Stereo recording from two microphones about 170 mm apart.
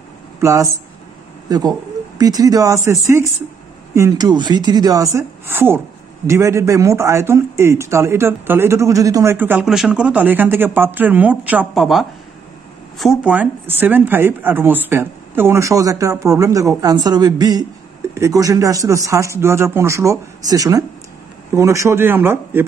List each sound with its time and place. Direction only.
0.4 s a man's voice: 15° right (ahead or behind)